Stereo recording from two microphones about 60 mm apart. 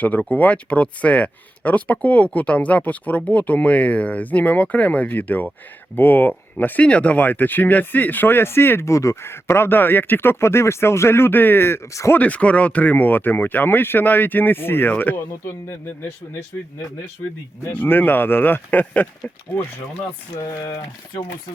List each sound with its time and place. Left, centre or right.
0.0 s speech: left
8.9 s speech: left
9.2 s speech: left
11.9 s speech: left
12.1 s speech: left
17.7 s speech: left